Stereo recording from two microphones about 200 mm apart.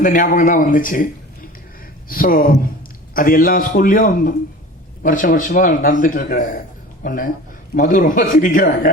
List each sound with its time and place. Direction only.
0.0 s a man's voice: 40° left (ahead or behind)